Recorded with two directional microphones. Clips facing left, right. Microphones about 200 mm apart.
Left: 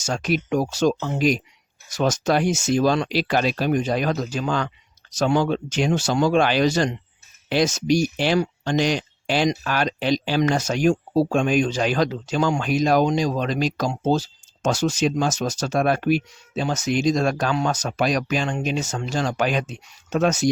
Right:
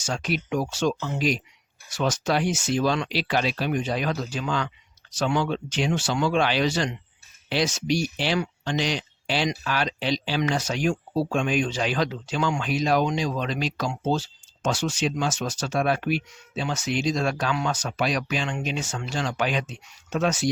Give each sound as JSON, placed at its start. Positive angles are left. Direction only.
{"t": 0.0, "sound": "speech", "side_deg": 45}